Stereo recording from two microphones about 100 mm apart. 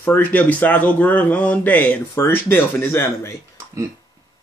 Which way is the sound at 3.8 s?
30° right (ahead or behind).